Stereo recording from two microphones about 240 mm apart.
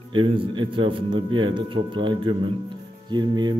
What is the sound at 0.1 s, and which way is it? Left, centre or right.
A man's voice, right.